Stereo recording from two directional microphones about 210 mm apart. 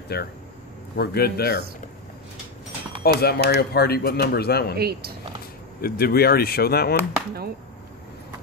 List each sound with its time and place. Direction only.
0.1 s speech: 50° left (ahead or behind)
3.0 s speech: 50° left (ahead or behind)
4.7 s speech: 50° right (ahead or behind)
5.8 s speech: 45° left (ahead or behind)